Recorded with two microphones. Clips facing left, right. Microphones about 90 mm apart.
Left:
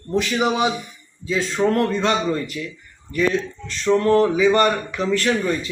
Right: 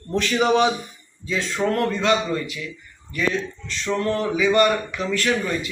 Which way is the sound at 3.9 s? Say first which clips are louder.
Left 6 dB; 40° left (ahead or behind).